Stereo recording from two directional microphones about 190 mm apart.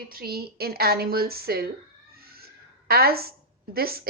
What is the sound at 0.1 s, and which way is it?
A woman's voice, 50° right (ahead or behind).